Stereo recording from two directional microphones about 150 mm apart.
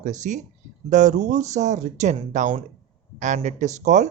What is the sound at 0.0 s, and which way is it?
Speech, 55° right (ahead or behind).